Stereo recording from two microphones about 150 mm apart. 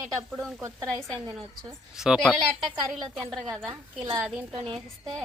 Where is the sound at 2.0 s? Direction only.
Centre (ahead or behind).